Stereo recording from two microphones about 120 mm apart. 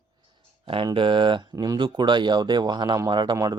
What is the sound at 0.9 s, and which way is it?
Speech, 45° right (ahead or behind).